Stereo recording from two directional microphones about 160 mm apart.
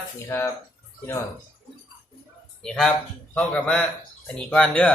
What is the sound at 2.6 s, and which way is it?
A man's voice, 5° left (ahead or behind).